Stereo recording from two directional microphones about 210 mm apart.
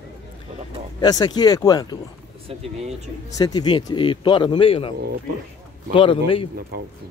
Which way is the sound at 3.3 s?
20° left (ahead or behind).